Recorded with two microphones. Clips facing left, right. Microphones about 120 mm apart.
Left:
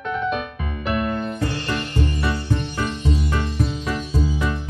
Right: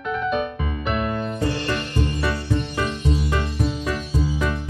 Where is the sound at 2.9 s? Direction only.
Centre (ahead or behind).